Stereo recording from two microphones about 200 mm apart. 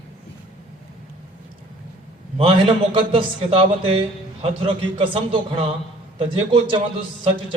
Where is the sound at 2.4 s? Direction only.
25° right (ahead or behind).